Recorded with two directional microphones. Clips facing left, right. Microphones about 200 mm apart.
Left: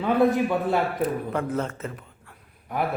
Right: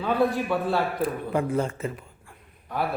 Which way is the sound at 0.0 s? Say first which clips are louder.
Left 3 dB; 20° left (ahead or behind).